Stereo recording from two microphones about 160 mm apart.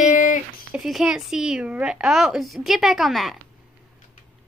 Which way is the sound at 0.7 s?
Centre (ahead or behind).